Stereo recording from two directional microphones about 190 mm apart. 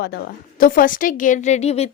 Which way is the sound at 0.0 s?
55° left (ahead or behind).